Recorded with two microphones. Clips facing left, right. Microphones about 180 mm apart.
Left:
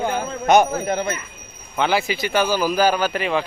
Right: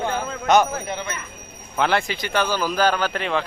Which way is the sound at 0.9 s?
45° left (ahead or behind).